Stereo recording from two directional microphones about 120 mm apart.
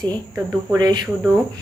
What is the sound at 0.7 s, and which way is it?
Speech, 35° right (ahead or behind).